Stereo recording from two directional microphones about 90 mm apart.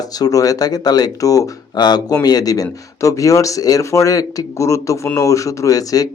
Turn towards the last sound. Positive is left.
turn(degrees=45)  # may be behind; listen again after turning